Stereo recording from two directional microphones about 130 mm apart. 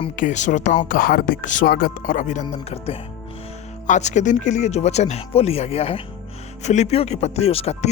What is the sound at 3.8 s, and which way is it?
Speech, 65° left (ahead or behind).